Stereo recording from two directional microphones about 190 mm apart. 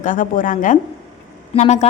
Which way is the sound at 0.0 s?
45° left (ahead or behind).